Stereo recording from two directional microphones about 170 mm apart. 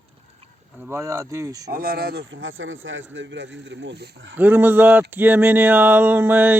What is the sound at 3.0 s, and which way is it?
Speech, 90° right.